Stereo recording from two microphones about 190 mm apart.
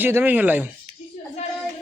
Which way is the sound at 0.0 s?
10° right (ahead or behind).